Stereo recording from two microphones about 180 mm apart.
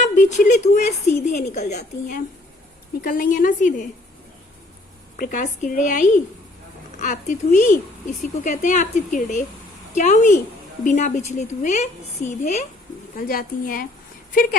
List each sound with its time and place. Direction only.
0.0 s speech: 40° left (ahead or behind)
5.1 s a woman's voice: 50° left (ahead or behind)
13.1 s speech: 55° left (ahead or behind)